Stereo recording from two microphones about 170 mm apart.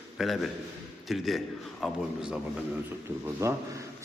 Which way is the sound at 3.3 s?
15° right (ahead or behind).